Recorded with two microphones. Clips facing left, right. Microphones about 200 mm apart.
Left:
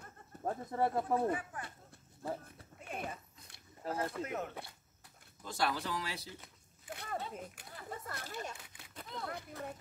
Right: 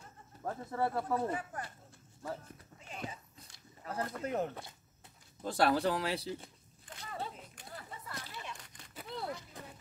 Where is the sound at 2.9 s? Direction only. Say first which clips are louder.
Left 2 dB; 55° left (ahead or behind).